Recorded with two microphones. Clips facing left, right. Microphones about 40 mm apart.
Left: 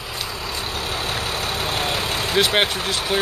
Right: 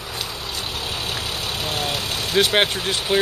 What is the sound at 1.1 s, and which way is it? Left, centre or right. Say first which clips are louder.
Vehicle: left 2 dB; left.